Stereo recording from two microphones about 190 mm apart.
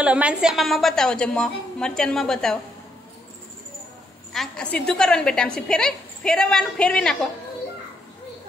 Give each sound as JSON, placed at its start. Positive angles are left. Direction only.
{"t": 0.0, "sound": "a woman's voice", "side_deg": -5}
{"t": 4.3, "sound": "a woman's voice", "side_deg": 5}